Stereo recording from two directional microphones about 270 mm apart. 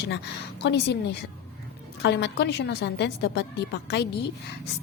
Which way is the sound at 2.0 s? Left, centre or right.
Left.